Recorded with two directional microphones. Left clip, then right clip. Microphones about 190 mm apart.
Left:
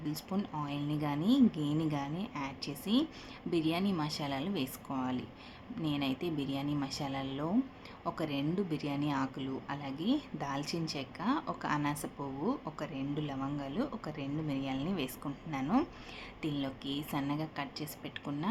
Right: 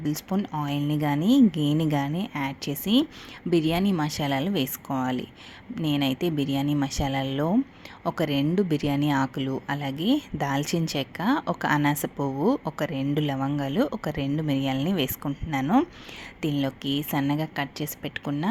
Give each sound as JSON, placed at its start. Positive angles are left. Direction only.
{"t": 0.0, "sound": "speech", "side_deg": -35}